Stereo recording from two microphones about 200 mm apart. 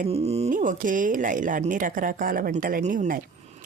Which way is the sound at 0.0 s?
30° right (ahead or behind).